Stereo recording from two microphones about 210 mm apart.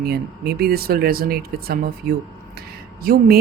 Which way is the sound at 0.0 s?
50° right (ahead or behind).